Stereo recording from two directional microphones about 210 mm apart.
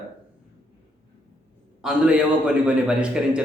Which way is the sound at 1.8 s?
5° right (ahead or behind).